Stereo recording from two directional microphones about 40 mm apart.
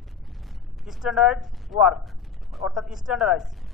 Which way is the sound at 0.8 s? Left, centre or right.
Centre.